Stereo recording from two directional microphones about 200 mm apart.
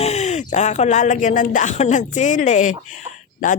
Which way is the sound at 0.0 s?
35° left (ahead or behind).